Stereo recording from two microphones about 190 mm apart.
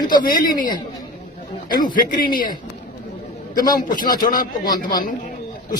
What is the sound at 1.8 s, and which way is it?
Speech, 45° left (ahead or behind).